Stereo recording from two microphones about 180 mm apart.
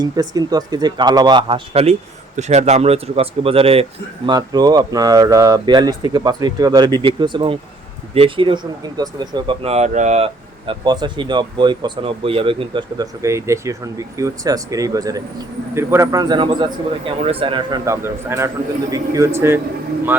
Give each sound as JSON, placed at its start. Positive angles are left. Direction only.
{"t": 0.0, "sound": "speech", "side_deg": -20}
{"t": 4.3, "sound": "a man's voice", "side_deg": -20}